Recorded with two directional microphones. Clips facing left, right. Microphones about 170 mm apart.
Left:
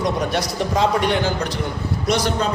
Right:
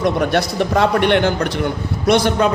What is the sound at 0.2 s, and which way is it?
A man's voice, 60° right (ahead or behind).